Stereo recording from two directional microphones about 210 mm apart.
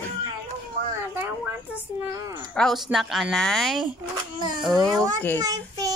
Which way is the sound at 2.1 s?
15° right (ahead or behind).